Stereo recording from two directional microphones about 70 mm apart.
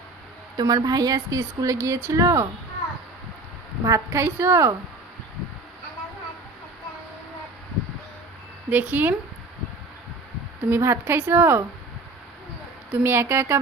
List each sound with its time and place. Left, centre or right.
0.5 s a woman's voice: right
3.8 s a woman's voice: right
8.7 s speech: right
10.7 s a woman's voice: right
11.0 s a woman's voice: right
12.9 s a woman's voice: right